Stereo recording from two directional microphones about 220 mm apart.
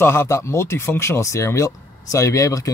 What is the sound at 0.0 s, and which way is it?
Speech, 10° left (ahead or behind).